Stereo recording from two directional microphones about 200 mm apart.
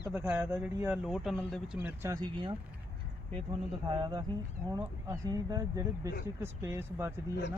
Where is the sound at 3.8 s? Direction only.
20° right (ahead or behind).